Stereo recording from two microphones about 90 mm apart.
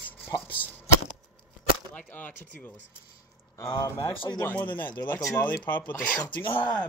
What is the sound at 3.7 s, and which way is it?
Speech, 55° left (ahead or behind).